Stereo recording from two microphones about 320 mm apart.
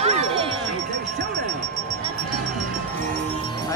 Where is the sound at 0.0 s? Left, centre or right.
Centre.